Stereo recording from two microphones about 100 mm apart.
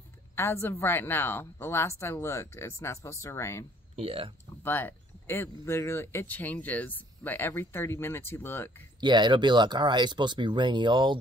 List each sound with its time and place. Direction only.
0.4 s speech: 25° left (ahead or behind)
3.9 s speech: 70° right (ahead or behind)
4.6 s speech: 20° left (ahead or behind)
9.0 s speech: 50° right (ahead or behind)